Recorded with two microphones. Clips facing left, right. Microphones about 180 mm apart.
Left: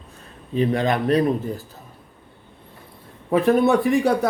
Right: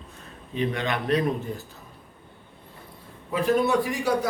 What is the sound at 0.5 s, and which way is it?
Speech, 40° left (ahead or behind).